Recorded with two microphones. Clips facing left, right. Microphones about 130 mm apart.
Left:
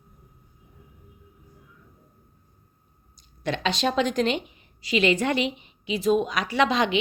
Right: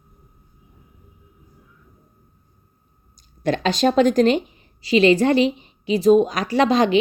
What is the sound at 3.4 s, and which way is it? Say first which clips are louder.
A woman's voice: right 6 dB; 40° right (ahead or behind).